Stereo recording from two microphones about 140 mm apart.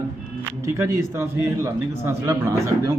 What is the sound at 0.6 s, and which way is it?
A man's voice, 20° right (ahead or behind).